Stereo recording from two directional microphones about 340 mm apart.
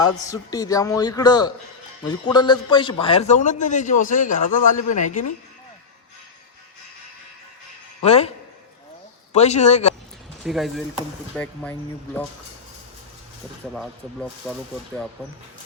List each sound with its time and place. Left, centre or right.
0.3 s a man's voice: centre
8.0 s a man's voice: centre
9.3 s a man's voice: centre
10.4 s speech: centre
14.5 s speech: centre